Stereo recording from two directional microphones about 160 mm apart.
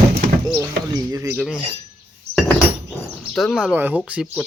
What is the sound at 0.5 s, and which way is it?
Speech, 20° right (ahead or behind).